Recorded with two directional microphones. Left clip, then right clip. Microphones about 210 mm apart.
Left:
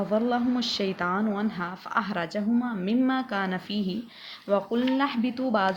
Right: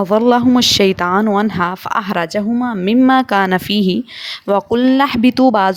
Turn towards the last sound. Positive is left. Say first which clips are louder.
# right 14 dB
turn(degrees=-50)  # may be behind; listen again after turning